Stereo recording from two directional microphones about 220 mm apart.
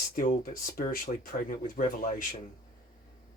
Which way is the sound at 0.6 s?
40° left (ahead or behind).